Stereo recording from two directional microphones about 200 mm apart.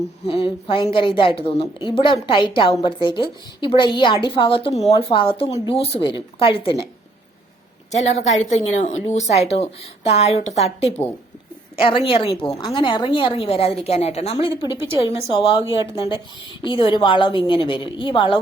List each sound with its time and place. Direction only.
0.3 s a woman's voice: 25° left (ahead or behind)
7.9 s a woman's voice: 35° left (ahead or behind)